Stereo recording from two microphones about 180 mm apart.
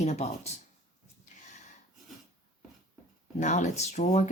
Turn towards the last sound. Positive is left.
turn(degrees=40)  # may be behind; listen again after turning